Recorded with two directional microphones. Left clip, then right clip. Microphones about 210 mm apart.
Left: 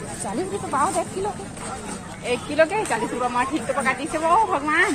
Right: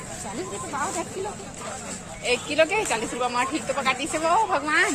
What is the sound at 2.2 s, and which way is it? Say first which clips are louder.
Speech: left 1 dB; 10° right (ahead or behind).